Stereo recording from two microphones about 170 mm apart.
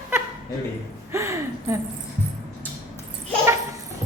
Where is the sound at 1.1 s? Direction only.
15° right (ahead or behind).